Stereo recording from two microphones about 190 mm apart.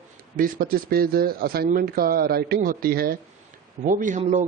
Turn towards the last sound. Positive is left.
turn(degrees=-40)  # may be behind; listen again after turning